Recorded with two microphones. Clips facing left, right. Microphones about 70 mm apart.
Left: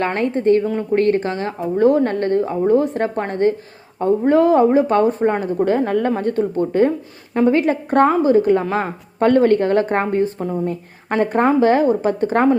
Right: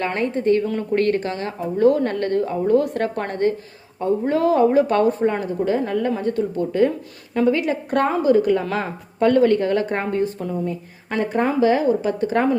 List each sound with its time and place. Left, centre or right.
0.0 s a woman's voice: left